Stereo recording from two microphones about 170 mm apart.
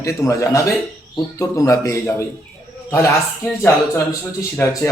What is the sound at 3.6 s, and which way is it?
A man's voice, 15° left (ahead or behind).